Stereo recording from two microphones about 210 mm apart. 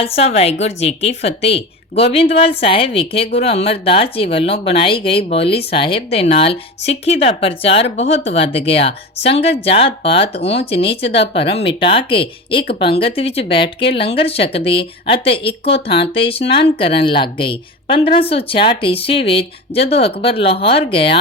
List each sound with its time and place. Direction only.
0.0 s a woman's voice: 30° left (ahead or behind)